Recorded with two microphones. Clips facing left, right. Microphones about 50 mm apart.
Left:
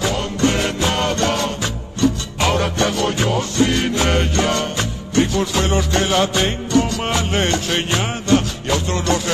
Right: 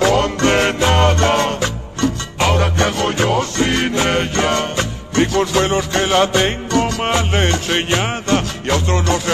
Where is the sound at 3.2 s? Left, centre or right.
Right.